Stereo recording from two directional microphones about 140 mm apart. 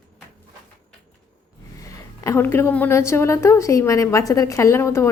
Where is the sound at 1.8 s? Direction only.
25° left (ahead or behind).